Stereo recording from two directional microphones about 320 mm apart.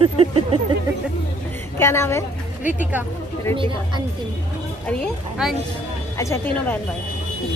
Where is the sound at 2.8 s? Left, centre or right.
Centre.